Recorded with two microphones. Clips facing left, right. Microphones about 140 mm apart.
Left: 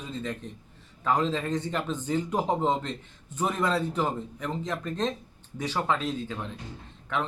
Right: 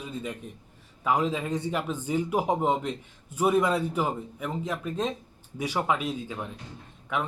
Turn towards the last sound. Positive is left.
turn(degrees=-10)  # may be behind; listen again after turning